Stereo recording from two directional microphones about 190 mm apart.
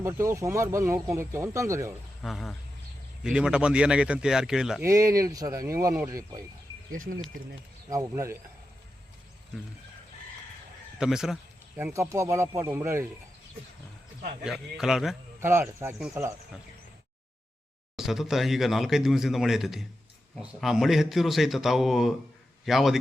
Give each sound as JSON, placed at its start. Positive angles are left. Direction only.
{"t": 0.0, "sound": "speech", "side_deg": -15}
{"t": 2.2, "sound": "speech", "side_deg": 0}
{"t": 4.8, "sound": "speech", "side_deg": -15}
{"t": 6.9, "sound": "speech", "side_deg": -45}
{"t": 7.9, "sound": "speech", "side_deg": -15}
{"t": 11.0, "sound": "speech", "side_deg": -5}
{"t": 11.8, "sound": "speech", "side_deg": -15}
{"t": 14.4, "sound": "speech", "side_deg": 0}
{"t": 15.4, "sound": "speech", "side_deg": -10}
{"t": 17.9, "sound": "speech", "side_deg": 0}